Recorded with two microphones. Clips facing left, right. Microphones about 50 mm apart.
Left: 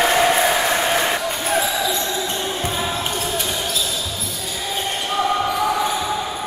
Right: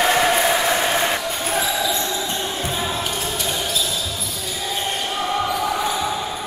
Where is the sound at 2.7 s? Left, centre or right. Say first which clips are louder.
Left 1 dB; centre.